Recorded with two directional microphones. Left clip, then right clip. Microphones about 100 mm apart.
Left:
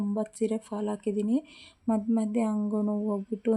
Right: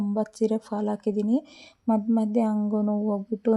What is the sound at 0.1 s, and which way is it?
Speech, 30° right (ahead or behind).